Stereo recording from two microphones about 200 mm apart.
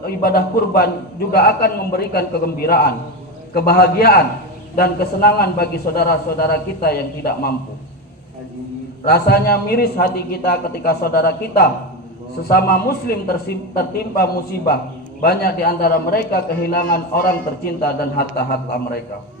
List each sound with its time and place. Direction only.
0.2 s a man's voice: 50° left (ahead or behind)
9.0 s a man's voice: 50° left (ahead or behind)